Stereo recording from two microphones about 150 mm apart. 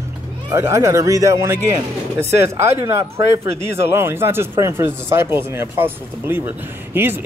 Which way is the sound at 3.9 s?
15° right (ahead or behind).